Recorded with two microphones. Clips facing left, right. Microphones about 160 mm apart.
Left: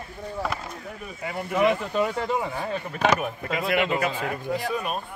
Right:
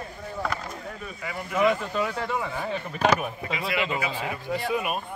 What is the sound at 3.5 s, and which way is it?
Speech, 50° left (ahead or behind).